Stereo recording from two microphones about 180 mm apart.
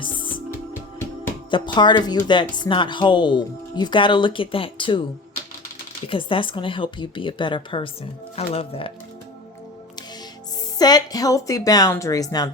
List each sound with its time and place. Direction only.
1.5 s speech: 25° left (ahead or behind)
6.1 s speech: 30° left (ahead or behind)
10.8 s speech: 20° left (ahead or behind)